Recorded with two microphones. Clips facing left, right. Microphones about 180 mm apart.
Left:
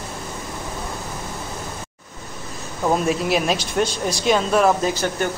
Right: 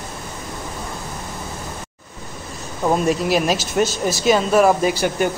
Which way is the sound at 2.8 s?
Centre (ahead or behind).